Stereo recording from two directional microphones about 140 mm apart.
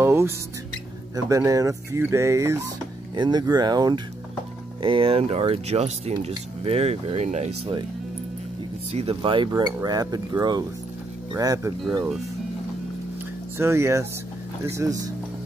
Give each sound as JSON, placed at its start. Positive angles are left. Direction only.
{"t": 0.0, "sound": "music", "side_deg": -20}
{"t": 1.1, "sound": "speech", "side_deg": -25}
{"t": 9.1, "sound": "speech", "side_deg": -35}
{"t": 9.5, "sound": "speech", "side_deg": -25}
{"t": 13.6, "sound": "speech", "side_deg": -20}